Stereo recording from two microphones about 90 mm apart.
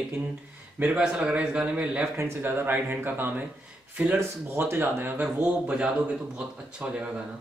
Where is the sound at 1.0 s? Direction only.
10° right (ahead or behind).